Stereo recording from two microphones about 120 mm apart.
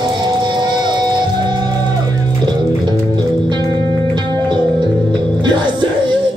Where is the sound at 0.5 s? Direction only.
40° right (ahead or behind).